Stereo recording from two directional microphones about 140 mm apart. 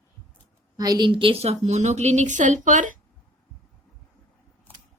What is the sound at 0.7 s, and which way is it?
A woman's voice, 30° right (ahead or behind).